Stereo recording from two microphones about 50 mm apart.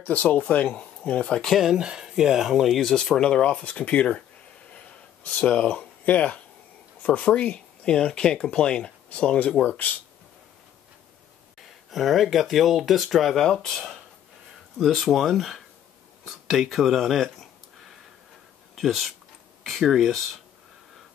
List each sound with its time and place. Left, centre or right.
0.0 s speech: left
0.7 s speech: centre
1.5 s speech: centre
2.8 s speech: centre
3.6 s speech: left
5.2 s speech: left
11.9 s speech: centre
14.8 s speech: centre
16.3 s a sound: centre
18.8 s speech: centre